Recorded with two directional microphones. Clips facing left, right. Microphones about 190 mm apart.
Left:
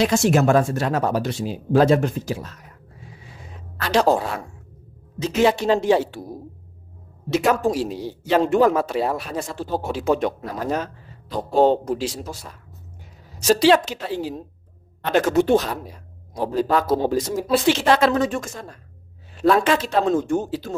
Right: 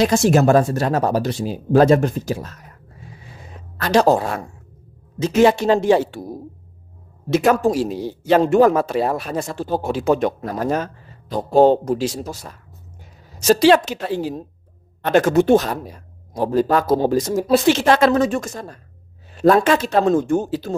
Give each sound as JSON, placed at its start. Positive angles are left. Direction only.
{"t": 0.0, "sound": "speech", "side_deg": -40}
{"t": 3.9, "sound": "a man's voice", "side_deg": -45}
{"t": 5.2, "sound": "a man's voice", "side_deg": -50}
{"t": 7.2, "sound": "a man's voice", "side_deg": -45}
{"t": 13.4, "sound": "a man's voice", "side_deg": -45}